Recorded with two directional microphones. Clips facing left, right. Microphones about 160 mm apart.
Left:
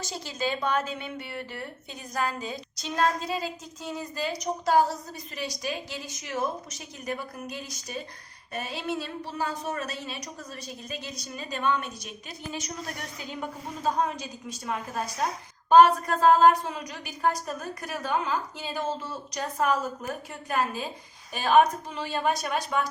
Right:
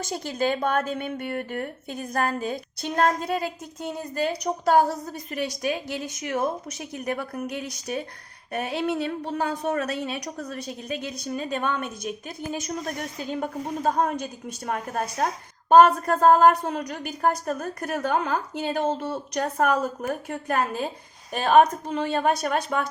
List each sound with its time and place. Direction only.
0.0 s a woman's voice: 55° right (ahead or behind)